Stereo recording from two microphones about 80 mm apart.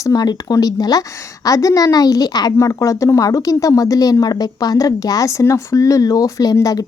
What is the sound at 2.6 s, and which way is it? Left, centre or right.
Speech, left.